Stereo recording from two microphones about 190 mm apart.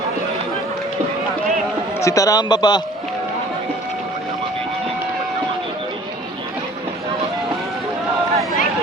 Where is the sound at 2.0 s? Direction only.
15° left (ahead or behind).